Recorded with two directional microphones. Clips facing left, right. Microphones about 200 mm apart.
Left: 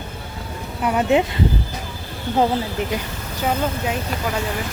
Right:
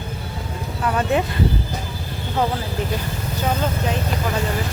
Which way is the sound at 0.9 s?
15° left (ahead or behind).